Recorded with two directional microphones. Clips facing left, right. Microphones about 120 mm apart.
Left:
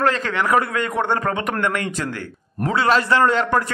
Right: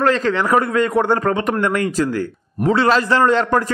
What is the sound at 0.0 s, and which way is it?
A man's voice, 35° right (ahead or behind).